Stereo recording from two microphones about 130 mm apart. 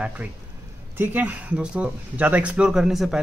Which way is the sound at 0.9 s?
15° right (ahead or behind).